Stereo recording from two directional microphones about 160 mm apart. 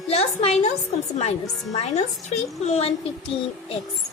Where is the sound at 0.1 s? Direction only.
40° left (ahead or behind).